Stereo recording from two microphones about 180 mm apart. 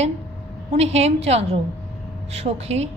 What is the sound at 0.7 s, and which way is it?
A woman's voice, 35° right (ahead or behind).